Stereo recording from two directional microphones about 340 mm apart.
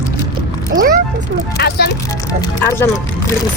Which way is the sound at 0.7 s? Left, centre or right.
Right.